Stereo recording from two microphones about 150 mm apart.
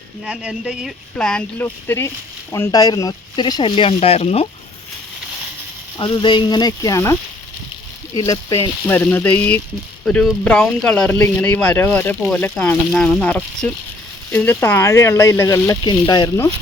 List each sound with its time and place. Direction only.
0.3 s speech: 5° right (ahead or behind)
1.1 s speech: 5° left (ahead or behind); by 4.4 s 45° left (ahead or behind)
6.0 s speech: 30° left (ahead or behind)
8.9 s speech: 15° left (ahead or behind); by 16.3 s 30° left (ahead or behind)